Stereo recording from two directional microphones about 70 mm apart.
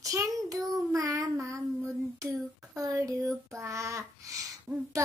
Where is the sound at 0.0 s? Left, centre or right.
Right.